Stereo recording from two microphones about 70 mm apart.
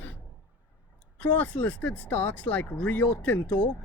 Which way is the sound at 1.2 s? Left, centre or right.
Left.